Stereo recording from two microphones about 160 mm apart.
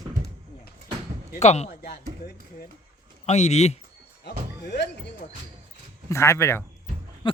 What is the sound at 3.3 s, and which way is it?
Speech, 45° left (ahead or behind).